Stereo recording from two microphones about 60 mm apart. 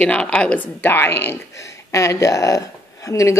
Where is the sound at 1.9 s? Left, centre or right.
Left.